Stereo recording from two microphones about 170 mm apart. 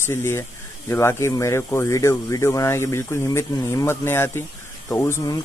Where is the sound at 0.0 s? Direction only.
15° left (ahead or behind).